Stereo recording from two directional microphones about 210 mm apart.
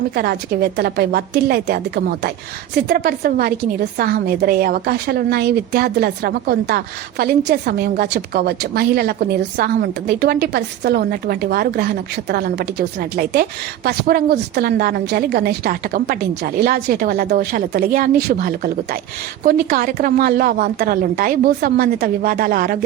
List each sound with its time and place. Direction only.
0.1 s a woman's voice: 45° right (ahead or behind)